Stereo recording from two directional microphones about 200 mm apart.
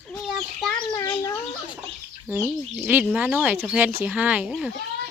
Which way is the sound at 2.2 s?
5° right (ahead or behind).